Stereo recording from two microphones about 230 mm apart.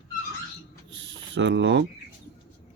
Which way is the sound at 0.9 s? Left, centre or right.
Right.